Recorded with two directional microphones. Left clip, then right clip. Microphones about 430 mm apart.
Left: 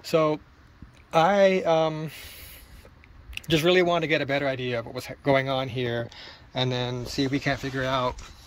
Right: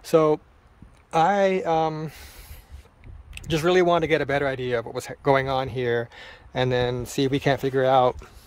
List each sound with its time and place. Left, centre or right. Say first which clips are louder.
0.1 s speech: right 4 dB; centre
3.4 s speech: right 1 dB; centre